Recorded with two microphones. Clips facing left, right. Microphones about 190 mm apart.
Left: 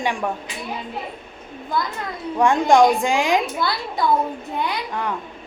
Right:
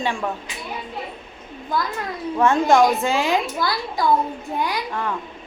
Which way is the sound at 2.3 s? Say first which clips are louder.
Left 1 dB; 15° left (ahead or behind).